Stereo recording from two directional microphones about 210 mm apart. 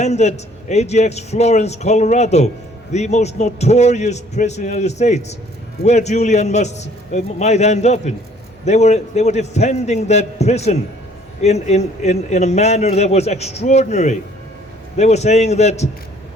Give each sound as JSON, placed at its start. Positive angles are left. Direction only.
{"t": 0.0, "sound": "a man's voice", "side_deg": 30}